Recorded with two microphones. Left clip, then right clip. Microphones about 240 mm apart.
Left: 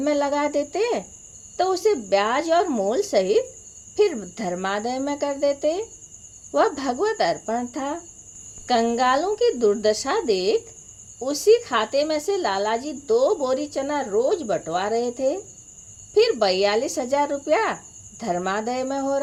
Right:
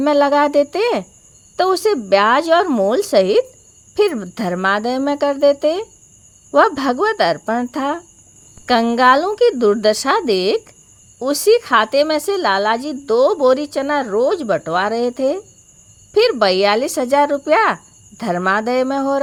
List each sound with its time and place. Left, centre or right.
0.0 s a woman's voice: right